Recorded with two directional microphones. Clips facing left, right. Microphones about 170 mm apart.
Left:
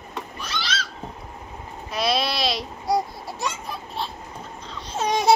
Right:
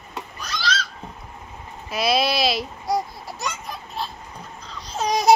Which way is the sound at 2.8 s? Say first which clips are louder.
Left 2 dB; 30° left (ahead or behind).